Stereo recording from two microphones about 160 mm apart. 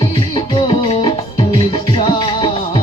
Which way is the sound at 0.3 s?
30° left (ahead or behind).